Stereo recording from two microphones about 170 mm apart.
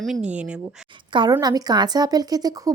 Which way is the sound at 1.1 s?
25° right (ahead or behind).